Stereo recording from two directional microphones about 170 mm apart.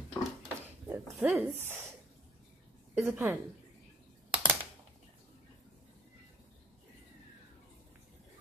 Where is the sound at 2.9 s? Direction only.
15° right (ahead or behind).